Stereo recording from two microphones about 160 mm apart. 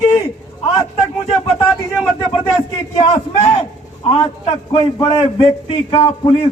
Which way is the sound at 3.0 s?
30° left (ahead or behind).